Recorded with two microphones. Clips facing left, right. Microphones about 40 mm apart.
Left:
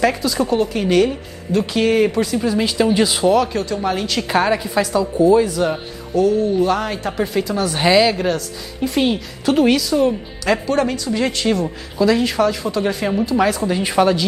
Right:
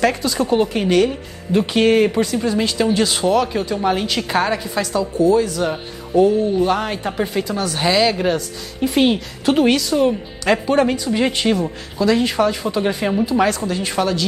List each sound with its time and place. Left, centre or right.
0.0 s speech: centre
0.5 s speech: centre
0.8 s speech: centre
1.5 s speech: right
2.0 s speech: centre
6.1 s speech: centre
7.6 s speech: centre
11.5 s speech: centre
13.5 s speech: centre